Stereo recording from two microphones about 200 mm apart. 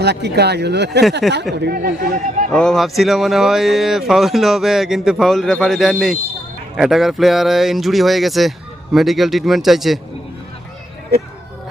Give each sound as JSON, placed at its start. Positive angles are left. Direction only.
{"t": 0.0, "sound": "speech", "side_deg": -55}
{"t": 1.2, "sound": "speech", "side_deg": 0}
{"t": 1.6, "sound": "speech", "side_deg": -50}
{"t": 2.5, "sound": "speech", "side_deg": 5}